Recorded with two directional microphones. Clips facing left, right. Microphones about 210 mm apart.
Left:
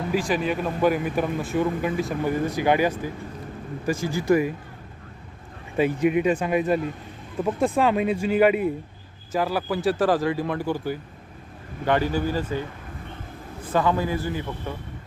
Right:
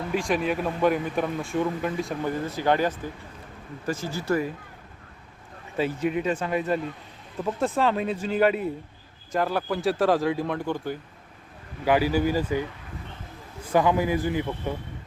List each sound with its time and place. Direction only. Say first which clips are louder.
0.1 s speech: left 1 dB; centre (ahead or behind)
2.3 s speech: left 3 dB; 15° left (ahead or behind)
5.7 s speech: left 5 dB; 15° left (ahead or behind)
11.9 s speech: right 1 dB; 10° right (ahead or behind)
13.7 s speech: right 1 dB; 15° right (ahead or behind)